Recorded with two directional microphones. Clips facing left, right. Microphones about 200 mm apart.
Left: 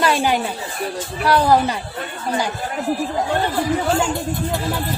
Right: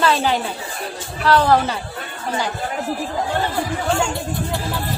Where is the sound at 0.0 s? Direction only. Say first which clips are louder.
Even; 10° left (ahead or behind).